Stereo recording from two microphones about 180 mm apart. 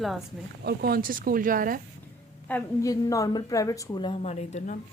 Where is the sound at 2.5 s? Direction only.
20° left (ahead or behind); by 4.8 s 40° left (ahead or behind).